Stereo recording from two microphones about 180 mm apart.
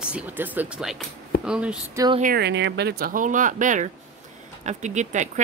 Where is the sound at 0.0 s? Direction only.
5° right (ahead or behind).